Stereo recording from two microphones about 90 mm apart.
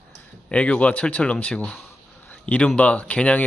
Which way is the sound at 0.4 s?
15° left (ahead or behind).